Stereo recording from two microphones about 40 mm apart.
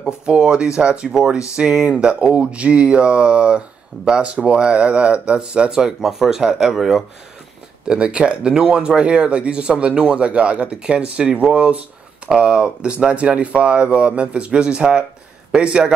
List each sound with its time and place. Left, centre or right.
0.0 s speech: right
2.5 s speech: right
5.9 s speech: centre
7.9 s speech: right